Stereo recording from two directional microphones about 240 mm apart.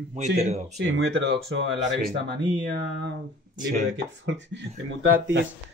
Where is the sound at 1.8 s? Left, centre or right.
Right.